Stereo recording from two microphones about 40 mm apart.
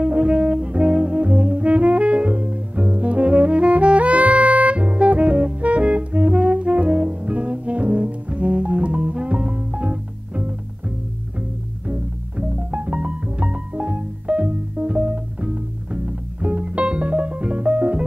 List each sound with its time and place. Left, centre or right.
0.0 s music: right
11.9 s music: right